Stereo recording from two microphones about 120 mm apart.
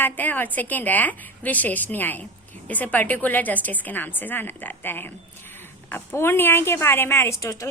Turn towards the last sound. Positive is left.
turn(degrees=25)  # may be behind; listen again after turning